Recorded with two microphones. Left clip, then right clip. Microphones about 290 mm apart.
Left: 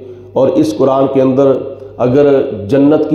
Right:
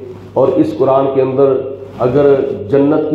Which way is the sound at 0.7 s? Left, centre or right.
Left.